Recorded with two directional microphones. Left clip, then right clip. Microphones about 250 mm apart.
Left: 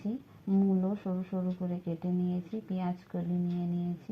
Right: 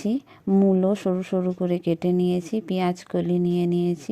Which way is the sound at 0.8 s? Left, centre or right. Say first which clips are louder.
Right 13 dB; right.